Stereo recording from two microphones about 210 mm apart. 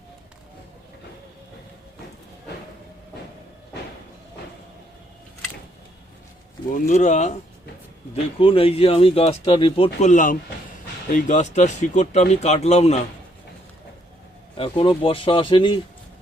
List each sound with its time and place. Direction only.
6.7 s speech: 35° left (ahead or behind)
14.5 s speech: 25° left (ahead or behind)